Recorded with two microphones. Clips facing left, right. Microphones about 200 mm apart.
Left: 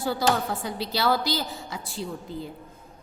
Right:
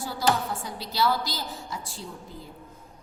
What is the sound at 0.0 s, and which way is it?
A woman's voice, 65° left (ahead or behind).